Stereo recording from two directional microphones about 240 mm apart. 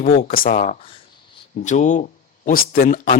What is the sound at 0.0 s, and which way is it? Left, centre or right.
Speech, left.